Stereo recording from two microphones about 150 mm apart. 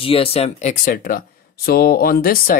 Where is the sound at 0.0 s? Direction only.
40° left (ahead or behind); by 1.2 s 65° left (ahead or behind).